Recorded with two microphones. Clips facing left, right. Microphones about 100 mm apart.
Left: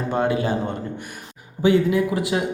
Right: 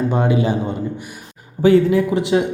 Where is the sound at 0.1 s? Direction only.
20° right (ahead or behind).